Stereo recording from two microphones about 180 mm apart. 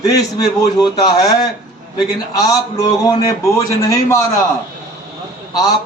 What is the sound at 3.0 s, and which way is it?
A man's voice, 20° left (ahead or behind).